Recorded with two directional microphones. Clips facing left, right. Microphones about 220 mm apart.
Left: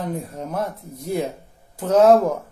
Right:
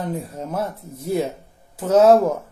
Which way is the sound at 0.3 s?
5° right (ahead or behind).